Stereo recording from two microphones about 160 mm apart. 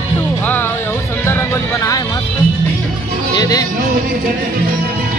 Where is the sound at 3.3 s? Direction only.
25° left (ahead or behind).